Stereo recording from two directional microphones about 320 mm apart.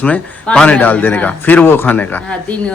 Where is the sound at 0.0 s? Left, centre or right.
Centre.